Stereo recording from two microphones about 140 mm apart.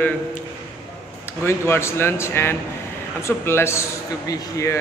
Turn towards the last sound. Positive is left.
turn(degrees=20)  # may be behind; listen again after turning